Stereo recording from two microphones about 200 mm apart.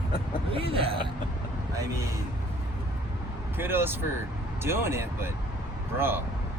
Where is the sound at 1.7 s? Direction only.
15° right (ahead or behind).